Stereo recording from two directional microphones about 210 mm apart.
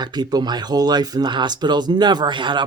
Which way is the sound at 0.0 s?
20° right (ahead or behind).